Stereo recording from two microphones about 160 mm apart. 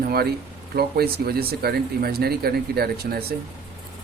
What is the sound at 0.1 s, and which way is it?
Speech, 75° right (ahead or behind).